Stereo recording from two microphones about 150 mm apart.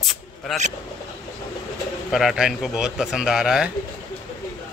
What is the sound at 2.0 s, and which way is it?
A man's voice, centre (ahead or behind).